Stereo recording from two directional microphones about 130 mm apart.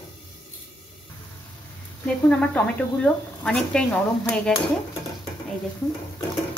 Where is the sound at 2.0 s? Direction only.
10° left (ahead or behind).